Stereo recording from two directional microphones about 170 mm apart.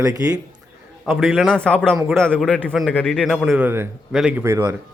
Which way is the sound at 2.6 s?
5° right (ahead or behind).